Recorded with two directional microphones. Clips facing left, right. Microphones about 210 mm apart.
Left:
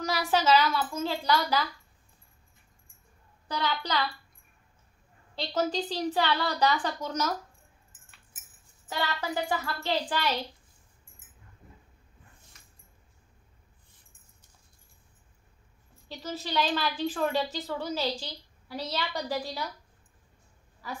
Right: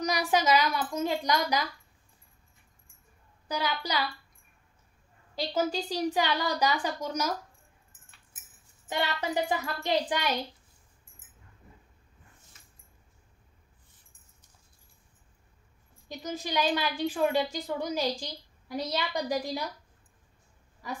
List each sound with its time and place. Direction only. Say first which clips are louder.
0.0 s a woman's voice: even; 15° right (ahead or behind)
3.4 s a woman's voice: even; 10° right (ahead or behind)
5.3 s a woman's voice: even; 10° right (ahead or behind)
8.8 s a woman's voice: right 1 dB; 20° right (ahead or behind)
16.1 s a woman's voice: right 1 dB; 15° right (ahead or behind)